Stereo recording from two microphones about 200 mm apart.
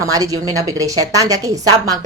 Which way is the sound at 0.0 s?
15° right (ahead or behind).